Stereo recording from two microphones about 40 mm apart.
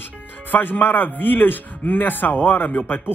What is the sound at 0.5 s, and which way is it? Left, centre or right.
Speech, left.